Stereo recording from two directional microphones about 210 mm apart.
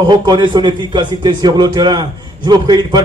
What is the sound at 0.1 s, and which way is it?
Speech, 20° right (ahead or behind).